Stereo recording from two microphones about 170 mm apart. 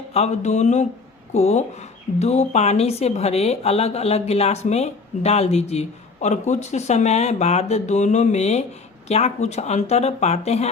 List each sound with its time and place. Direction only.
0.1 s a woman's voice: 40° left (ahead or behind)